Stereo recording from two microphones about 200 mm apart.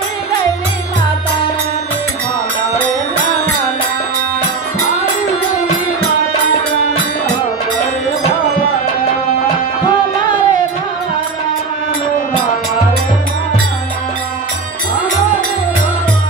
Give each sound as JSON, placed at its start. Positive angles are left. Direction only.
{"t": 9.8, "sound": "music", "side_deg": 20}